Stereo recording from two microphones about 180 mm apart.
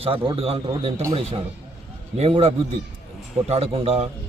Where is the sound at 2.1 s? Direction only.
35° right (ahead or behind).